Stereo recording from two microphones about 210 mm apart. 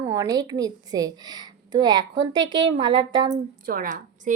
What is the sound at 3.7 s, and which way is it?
Speech, 40° right (ahead or behind).